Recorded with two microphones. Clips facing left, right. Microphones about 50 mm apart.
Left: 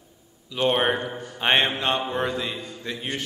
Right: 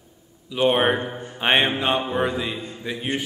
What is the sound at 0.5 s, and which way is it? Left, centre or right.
A man's voice, centre.